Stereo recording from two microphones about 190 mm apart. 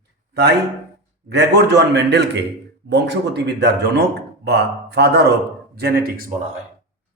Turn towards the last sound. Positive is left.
turn(degrees=-55)  # may be behind; listen again after turning